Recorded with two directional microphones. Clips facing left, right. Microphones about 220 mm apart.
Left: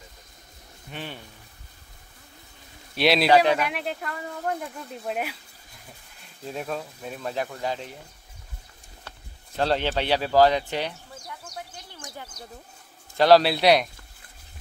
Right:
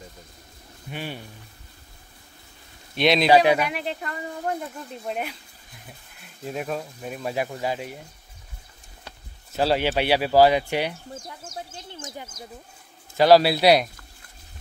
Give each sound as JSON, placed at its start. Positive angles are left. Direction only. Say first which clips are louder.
{"t": 0.9, "sound": "speech", "louder": "right 3 dB", "side_deg": -10}
{"t": 3.0, "sound": "speech", "louder": "right 1 dB", "side_deg": 5}
{"t": 3.3, "sound": "speech", "louder": "right 3 dB", "side_deg": -10}
{"t": 3.6, "sound": "speech", "louder": "right 1 dB", "side_deg": 0}
{"t": 6.4, "sound": "speech", "louder": "right 2 dB", "side_deg": -5}
{"t": 9.0, "sound": "speech", "louder": "right 2 dB", "side_deg": -5}
{"t": 11.2, "sound": "speech", "louder": "right 2 dB", "side_deg": -30}
{"t": 13.2, "sound": "speech", "louder": "right 1 dB", "side_deg": -5}